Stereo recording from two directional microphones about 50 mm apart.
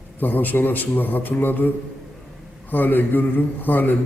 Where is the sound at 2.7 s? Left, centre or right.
Left.